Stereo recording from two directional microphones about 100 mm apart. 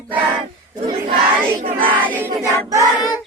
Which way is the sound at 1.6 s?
60° right (ahead or behind).